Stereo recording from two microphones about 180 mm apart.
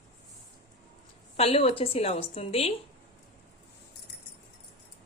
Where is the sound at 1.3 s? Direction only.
35° left (ahead or behind).